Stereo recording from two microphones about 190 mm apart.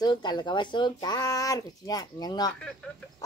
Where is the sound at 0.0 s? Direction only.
20° left (ahead or behind).